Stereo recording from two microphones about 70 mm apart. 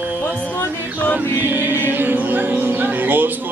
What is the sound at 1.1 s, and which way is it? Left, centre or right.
Music, right.